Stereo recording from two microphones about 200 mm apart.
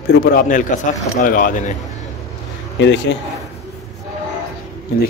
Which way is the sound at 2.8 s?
65° left (ahead or behind).